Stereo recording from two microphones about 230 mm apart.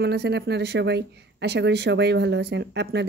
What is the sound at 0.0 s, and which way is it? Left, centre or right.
Speech, right.